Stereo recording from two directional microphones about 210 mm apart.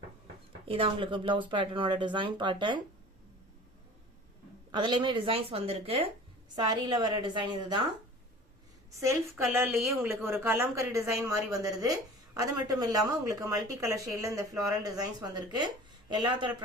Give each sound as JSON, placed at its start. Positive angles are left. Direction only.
{"t": 0.7, "sound": "speech", "side_deg": -25}
{"t": 4.7, "sound": "speech", "side_deg": -20}
{"t": 9.0, "sound": "speech", "side_deg": -10}